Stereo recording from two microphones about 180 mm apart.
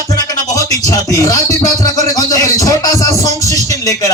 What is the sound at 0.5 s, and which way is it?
Speech, 20° left (ahead or behind).